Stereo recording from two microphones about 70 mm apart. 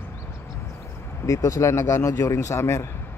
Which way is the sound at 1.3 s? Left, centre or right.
Left.